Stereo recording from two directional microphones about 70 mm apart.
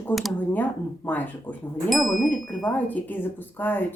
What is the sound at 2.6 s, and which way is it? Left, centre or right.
Speech, left.